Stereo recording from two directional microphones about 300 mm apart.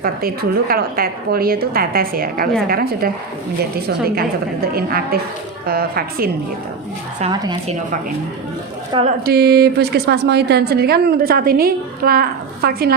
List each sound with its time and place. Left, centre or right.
0.0 s a woman's voice: right
7.2 s a woman's voice: centre
8.9 s a woman's voice: centre
9.2 s a woman's voice: right